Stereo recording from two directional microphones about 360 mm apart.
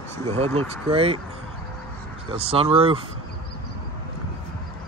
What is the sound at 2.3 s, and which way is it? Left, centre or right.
Speech, centre.